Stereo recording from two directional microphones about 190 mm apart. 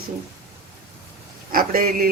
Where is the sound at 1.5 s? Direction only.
50° right (ahead or behind).